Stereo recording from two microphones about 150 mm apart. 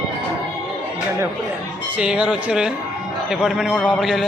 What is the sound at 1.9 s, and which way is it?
A man's voice, 5° right (ahead or behind).